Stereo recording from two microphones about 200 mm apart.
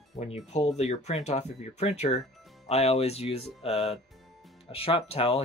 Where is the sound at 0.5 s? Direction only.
35° left (ahead or behind).